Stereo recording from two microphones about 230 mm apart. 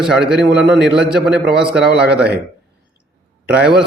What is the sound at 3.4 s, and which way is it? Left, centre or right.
Speech, right.